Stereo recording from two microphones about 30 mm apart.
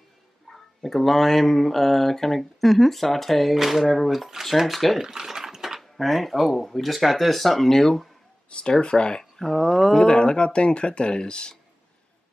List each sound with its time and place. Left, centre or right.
0.5 s speech: centre
3.5 s speech: centre
5.0 s a sound: centre
5.8 s speech: centre
8.5 s speech: left
9.2 s a sound: centre
9.8 s speech: centre
10.0 s speech: left